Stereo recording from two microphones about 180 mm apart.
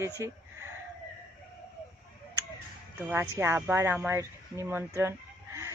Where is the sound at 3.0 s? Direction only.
10° right (ahead or behind).